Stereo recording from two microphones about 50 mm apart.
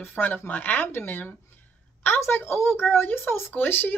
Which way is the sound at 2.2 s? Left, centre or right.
Left.